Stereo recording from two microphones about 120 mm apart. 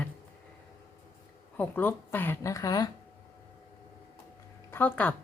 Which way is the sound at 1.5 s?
15° left (ahead or behind).